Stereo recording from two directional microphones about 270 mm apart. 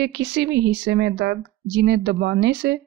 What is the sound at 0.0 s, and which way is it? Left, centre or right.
A woman's voice, right.